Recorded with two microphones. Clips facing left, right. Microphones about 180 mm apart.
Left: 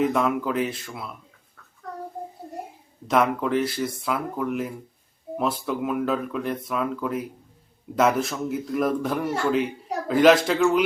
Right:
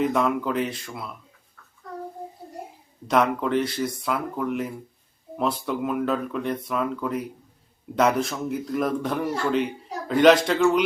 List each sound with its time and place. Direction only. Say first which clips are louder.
0.0 s speech: even; centre (ahead or behind)
3.1 s speech: even; centre (ahead or behind)